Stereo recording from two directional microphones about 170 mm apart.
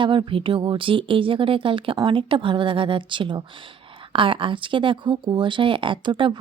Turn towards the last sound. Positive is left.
turn(degrees=-30)  # may be behind; listen again after turning